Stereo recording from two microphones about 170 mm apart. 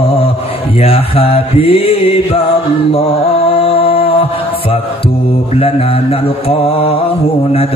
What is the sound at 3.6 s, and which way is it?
Music, 35° left (ahead or behind).